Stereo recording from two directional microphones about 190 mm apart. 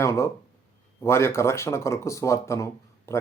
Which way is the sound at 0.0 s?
15° left (ahead or behind).